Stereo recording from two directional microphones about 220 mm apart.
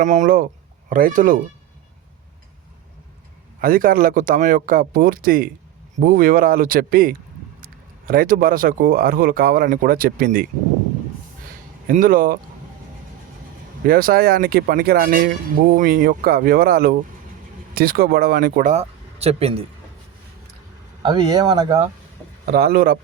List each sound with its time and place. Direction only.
0.0 s speech: 35° right (ahead or behind)
3.6 s speech: 40° right (ahead or behind)
11.9 s speech: 40° right (ahead or behind)
13.8 s speech: 40° right (ahead or behind)
21.0 s speech: 20° right (ahead or behind)
22.4 s speech: 45° right (ahead or behind)